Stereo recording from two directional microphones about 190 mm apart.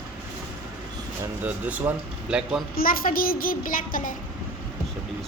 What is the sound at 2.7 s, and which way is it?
A child's voice, 50° left (ahead or behind).